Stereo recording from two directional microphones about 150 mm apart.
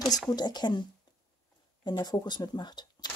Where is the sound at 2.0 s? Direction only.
30° left (ahead or behind).